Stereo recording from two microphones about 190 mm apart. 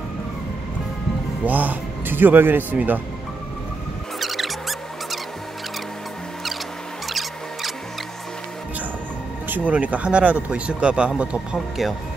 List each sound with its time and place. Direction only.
1.4 s speech: 10° right (ahead or behind)
4.2 s music: centre (ahead or behind)
9.7 s speech: 5° right (ahead or behind)